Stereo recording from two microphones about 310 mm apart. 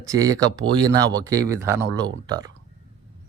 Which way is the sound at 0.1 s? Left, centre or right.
Centre.